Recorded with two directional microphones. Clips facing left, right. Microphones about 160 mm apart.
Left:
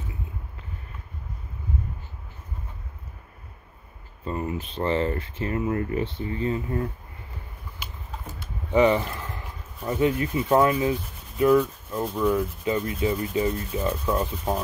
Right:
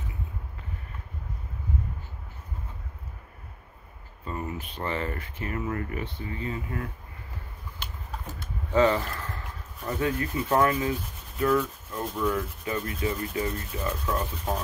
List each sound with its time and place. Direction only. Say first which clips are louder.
4.2 s speech: left 5 dB; 30° left (ahead or behind)
8.7 s speech: left 3 dB; 15° left (ahead or behind)
11.3 s rub: left 5 dB; 15° left (ahead or behind)